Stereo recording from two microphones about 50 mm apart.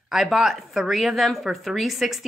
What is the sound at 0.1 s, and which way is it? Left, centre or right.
Speech, centre.